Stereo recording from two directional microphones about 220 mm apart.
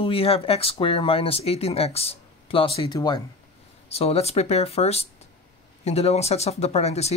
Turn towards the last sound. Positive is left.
turn(degrees=30)  # may be behind; listen again after turning